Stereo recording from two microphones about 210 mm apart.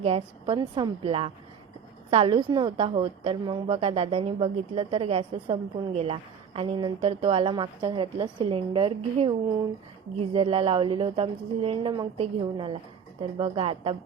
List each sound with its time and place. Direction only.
0.0 s a woman's voice: 25° right (ahead or behind)